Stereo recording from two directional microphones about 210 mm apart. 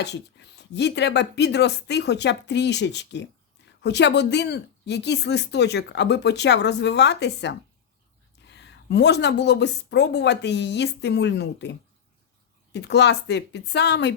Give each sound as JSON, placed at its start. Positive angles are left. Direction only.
{"t": 0.0, "sound": "a woman's voice", "side_deg": 55}